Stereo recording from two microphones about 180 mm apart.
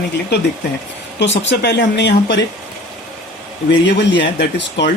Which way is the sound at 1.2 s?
80° left.